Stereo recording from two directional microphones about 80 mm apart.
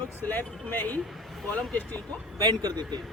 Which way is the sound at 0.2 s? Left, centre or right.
Left.